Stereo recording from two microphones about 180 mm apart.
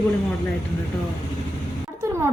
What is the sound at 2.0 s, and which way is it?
Music, 15° right (ahead or behind).